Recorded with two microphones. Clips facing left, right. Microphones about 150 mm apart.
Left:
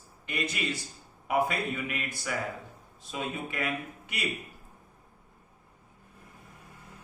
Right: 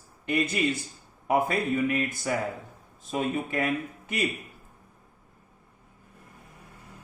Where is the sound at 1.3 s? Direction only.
45° right (ahead or behind).